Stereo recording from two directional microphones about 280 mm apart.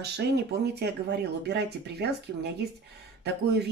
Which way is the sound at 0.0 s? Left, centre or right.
Right.